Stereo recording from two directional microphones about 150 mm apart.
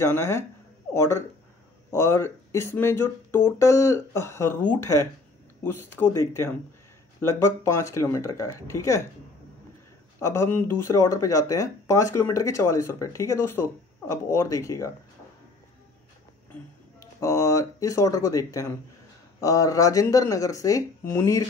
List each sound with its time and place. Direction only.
0.0 s speech: 15° left (ahead or behind)
10.2 s speech: 15° left (ahead or behind)
17.0 s speech: 20° left (ahead or behind)